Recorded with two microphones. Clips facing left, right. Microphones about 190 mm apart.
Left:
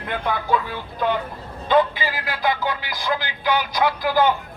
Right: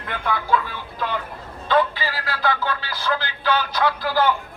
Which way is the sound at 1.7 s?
15° left (ahead or behind).